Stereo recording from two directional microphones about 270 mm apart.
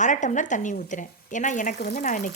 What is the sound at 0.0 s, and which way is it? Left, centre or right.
A woman's voice, left.